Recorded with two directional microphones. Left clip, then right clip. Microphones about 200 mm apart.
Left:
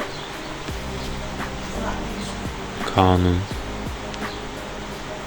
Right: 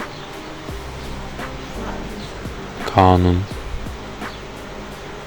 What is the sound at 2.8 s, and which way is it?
Speech, 20° right (ahead or behind).